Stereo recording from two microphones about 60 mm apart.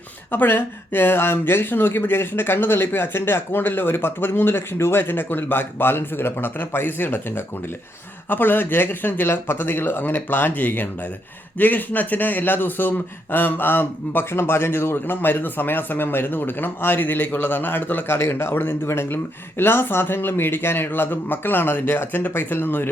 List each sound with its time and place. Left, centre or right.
0.3 s a man's voice: left
9.2 s a man's voice: left